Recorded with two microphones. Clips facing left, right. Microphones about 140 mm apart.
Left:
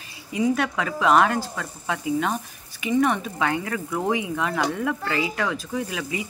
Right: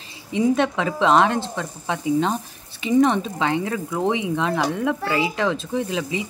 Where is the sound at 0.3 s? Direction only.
25° right (ahead or behind).